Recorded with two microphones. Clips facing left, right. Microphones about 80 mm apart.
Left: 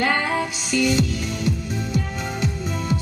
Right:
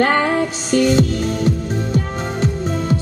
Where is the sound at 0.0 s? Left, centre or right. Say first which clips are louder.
Right 6 dB; right.